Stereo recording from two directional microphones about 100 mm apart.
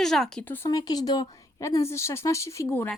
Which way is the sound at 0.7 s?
40° left (ahead or behind).